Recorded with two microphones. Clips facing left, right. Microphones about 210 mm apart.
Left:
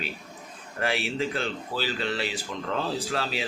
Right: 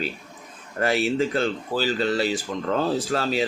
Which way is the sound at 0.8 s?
45° right (ahead or behind).